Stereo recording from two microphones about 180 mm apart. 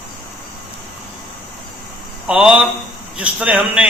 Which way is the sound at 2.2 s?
5° right (ahead or behind).